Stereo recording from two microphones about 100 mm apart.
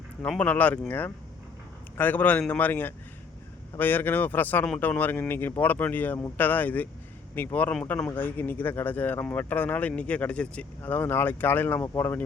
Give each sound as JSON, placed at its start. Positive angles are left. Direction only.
{"t": 0.2, "sound": "speech", "side_deg": 15}